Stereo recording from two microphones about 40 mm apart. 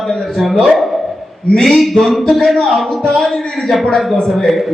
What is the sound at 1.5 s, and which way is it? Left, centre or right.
A man's voice, centre.